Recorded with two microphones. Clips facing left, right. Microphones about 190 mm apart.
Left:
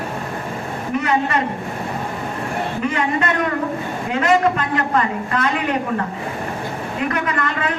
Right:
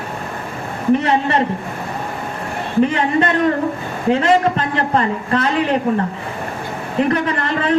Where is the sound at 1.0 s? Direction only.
30° right (ahead or behind).